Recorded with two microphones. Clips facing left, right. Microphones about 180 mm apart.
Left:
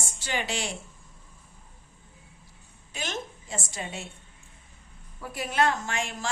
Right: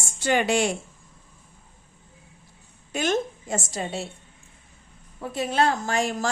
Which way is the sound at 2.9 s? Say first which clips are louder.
Right 11 dB; 50° right (ahead or behind).